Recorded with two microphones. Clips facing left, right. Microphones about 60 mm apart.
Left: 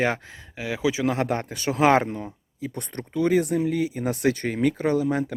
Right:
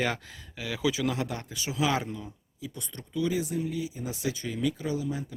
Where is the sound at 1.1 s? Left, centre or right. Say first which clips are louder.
Left 8 dB; left.